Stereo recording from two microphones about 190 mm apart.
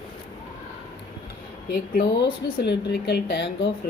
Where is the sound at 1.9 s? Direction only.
50° left (ahead or behind).